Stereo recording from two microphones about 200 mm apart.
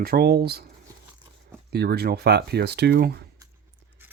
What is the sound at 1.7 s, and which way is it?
Speech, 55° right (ahead or behind).